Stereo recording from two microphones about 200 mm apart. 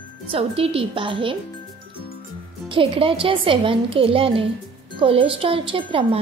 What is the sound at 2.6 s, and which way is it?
A woman's voice, 25° right (ahead or behind).